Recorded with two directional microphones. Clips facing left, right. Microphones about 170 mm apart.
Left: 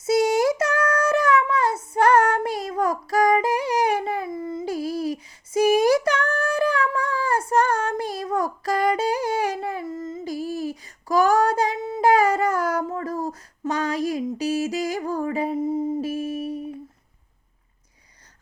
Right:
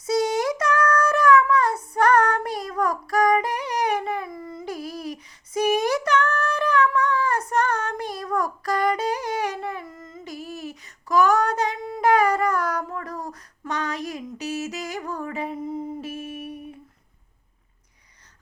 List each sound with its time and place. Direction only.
0.0 s child singing: 25° left (ahead or behind)
2.6 s a sound: 25° left (ahead or behind)
8.6 s humming: 30° left (ahead or behind)
13.2 s female singing: 35° left (ahead or behind)